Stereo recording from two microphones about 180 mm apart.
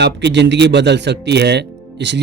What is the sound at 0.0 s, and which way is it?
Speech, 70° right (ahead or behind).